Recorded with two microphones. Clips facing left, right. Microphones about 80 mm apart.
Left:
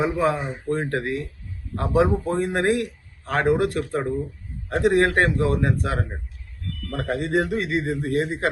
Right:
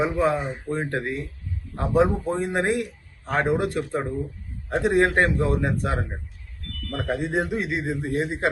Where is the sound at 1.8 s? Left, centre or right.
Centre.